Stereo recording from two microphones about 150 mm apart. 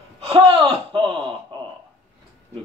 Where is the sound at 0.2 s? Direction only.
40° right (ahead or behind).